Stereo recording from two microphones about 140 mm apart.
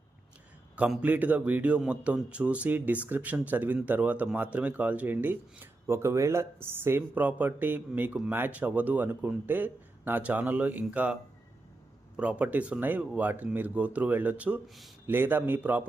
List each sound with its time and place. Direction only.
0.8 s speech: 10° right (ahead or behind)